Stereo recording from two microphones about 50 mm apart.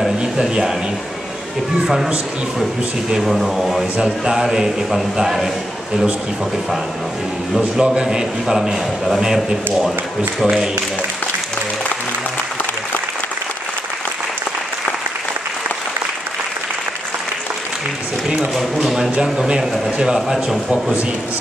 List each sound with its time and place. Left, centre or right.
0.2 s speech: centre
3.2 s a man's voice: centre
7.5 s a man's voice: centre
9.2 s a man's voice: centre
18.6 s speech: centre
19.3 s a man's voice: centre